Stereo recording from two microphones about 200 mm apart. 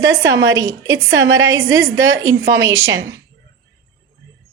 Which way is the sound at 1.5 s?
15° right (ahead or behind).